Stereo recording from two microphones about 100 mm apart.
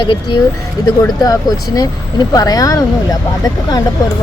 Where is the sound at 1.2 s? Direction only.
40° left (ahead or behind).